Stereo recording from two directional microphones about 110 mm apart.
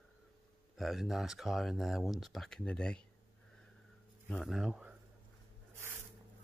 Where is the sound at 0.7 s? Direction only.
Centre (ahead or behind).